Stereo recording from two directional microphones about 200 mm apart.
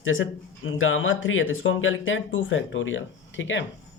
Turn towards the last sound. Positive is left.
turn(degrees=70)  # may be behind; listen again after turning